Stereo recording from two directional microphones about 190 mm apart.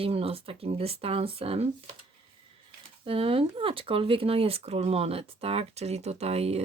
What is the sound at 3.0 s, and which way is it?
Speech, 30° right (ahead or behind).